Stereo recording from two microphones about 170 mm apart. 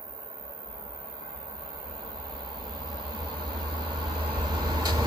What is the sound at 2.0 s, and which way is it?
Vehicle, 25° right (ahead or behind).